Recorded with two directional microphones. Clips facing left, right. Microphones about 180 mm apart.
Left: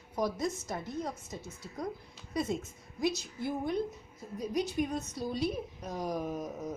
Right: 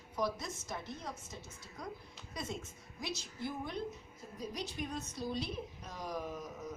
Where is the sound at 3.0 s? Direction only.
45° left (ahead or behind).